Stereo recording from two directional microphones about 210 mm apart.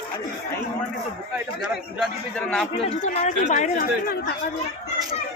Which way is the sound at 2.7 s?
30° left (ahead or behind).